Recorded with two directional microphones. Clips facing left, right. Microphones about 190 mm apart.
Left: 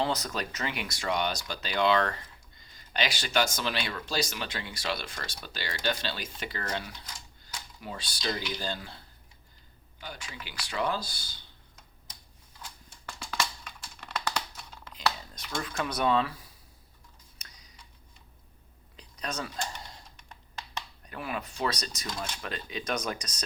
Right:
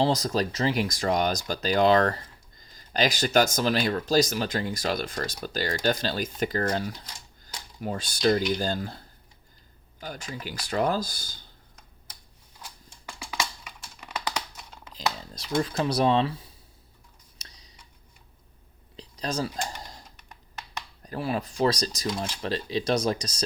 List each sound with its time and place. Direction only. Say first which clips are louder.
0.0 s speech: right 7 dB; 35° right (ahead or behind)
13.1 s a sound: right 1 dB; 10° right (ahead or behind)
14.0 s computer keyboard: right 1 dB; 10° right (ahead or behind)
15.3 s speech: right 9 dB; 30° right (ahead or behind)
17.4 s tick-tock: right 3 dB; 30° right (ahead or behind)
18.9 s a sound: right 6 dB; 30° right (ahead or behind)
21.0 s speech: right 8 dB; 35° right (ahead or behind)